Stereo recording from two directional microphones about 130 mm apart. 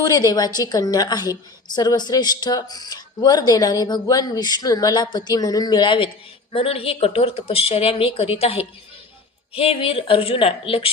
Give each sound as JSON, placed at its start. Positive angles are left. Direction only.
{"t": 0.0, "sound": "a woman's voice", "side_deg": 30}